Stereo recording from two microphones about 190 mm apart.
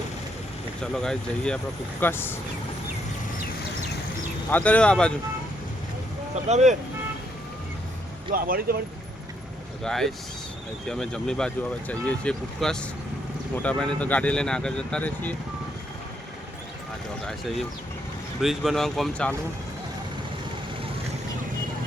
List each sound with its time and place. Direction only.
0.8 s speech: 5° left (ahead or behind)
4.5 s speech: 5° left (ahead or behind)
6.5 s speech: 35° right (ahead or behind)
8.3 s speech: 50° right (ahead or behind)
9.8 s speech: centre (ahead or behind)
17.2 s speech: centre (ahead or behind)